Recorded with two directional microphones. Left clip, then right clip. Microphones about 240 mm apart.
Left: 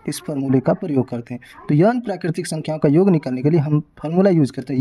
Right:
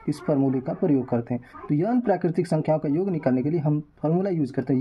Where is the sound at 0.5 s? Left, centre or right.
Left.